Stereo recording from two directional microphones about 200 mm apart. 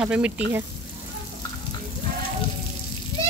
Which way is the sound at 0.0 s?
5° right (ahead or behind).